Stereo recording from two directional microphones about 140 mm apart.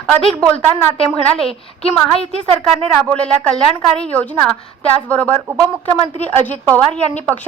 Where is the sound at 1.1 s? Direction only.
5° left (ahead or behind).